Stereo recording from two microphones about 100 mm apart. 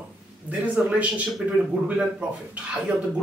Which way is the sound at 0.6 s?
15° right (ahead or behind).